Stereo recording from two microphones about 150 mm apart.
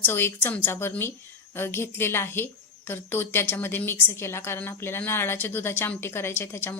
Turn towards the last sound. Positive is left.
turn(degrees=15)  # may be behind; listen again after turning